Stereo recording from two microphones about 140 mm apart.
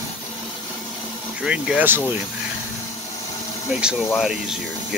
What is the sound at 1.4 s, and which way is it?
Speech, 5° right (ahead or behind).